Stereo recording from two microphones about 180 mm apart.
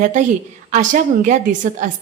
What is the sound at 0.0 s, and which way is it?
A woman's voice, 45° right (ahead or behind).